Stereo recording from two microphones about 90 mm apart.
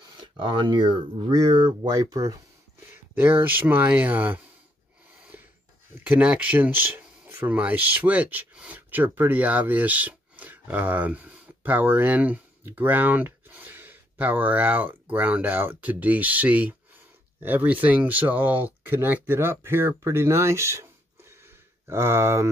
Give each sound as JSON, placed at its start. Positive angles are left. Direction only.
{"t": 0.4, "sound": "speech", "side_deg": -65}
{"t": 1.9, "sound": "speech", "side_deg": -45}
{"t": 2.9, "sound": "speech", "side_deg": -20}
{"t": 5.3, "sound": "a sound", "side_deg": -20}
{"t": 6.0, "sound": "speech", "side_deg": -15}